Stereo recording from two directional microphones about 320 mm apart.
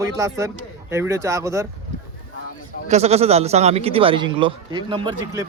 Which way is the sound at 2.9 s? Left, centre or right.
Centre.